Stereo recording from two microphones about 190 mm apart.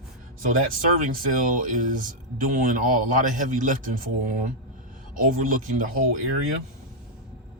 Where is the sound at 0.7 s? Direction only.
45° right (ahead or behind).